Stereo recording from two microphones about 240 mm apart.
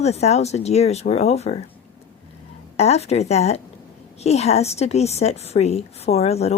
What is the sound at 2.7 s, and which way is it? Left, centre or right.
A woman's voice, left.